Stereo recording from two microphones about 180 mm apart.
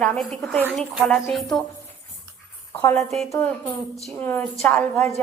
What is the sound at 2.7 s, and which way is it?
A woman's voice, 5° left (ahead or behind).